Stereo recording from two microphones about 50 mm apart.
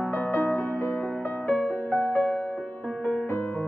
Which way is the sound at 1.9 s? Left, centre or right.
Left.